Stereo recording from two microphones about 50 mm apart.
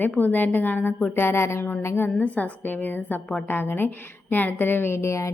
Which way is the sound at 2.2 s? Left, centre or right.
Left.